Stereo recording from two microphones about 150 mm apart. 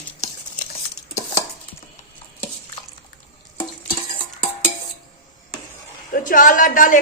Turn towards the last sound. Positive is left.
turn(degrees=60)  # may be behind; listen again after turning